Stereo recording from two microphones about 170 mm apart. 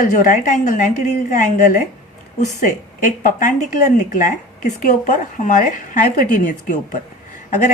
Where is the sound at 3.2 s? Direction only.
50° left (ahead or behind).